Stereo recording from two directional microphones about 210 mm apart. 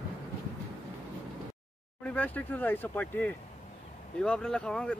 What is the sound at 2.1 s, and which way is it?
Speech, 10° left (ahead or behind).